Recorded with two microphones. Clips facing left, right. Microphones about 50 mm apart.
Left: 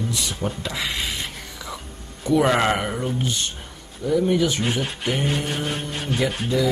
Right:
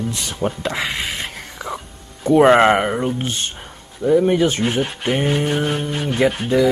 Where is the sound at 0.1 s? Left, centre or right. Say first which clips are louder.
Right 4 dB; right.